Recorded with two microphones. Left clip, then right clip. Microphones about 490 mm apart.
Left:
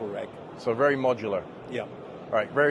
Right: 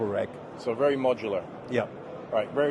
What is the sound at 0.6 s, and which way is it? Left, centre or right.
Speech, left.